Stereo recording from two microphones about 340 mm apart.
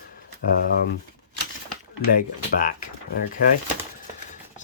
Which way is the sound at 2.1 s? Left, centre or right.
Left.